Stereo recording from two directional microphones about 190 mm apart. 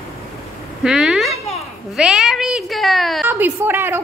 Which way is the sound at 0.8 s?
Centre (ahead or behind).